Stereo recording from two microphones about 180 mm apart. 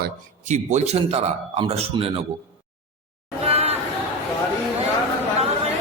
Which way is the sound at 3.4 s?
35° right (ahead or behind).